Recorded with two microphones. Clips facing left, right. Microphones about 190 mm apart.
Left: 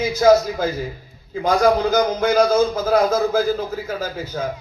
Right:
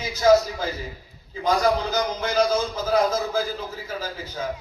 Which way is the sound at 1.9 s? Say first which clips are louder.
Left 7 dB; 50° left (ahead or behind).